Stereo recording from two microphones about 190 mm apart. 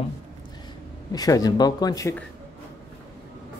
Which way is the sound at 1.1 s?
20° left (ahead or behind).